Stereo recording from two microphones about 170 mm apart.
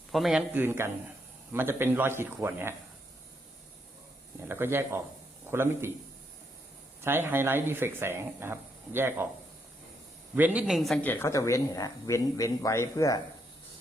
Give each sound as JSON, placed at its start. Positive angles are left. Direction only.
{"t": 0.1, "sound": "speech", "side_deg": 0}
{"t": 4.4, "sound": "speech", "side_deg": -15}
{"t": 7.0, "sound": "speech", "side_deg": -15}
{"t": 10.3, "sound": "speech", "side_deg": -10}